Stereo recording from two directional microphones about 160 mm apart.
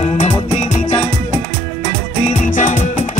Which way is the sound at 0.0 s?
45° left (ahead or behind).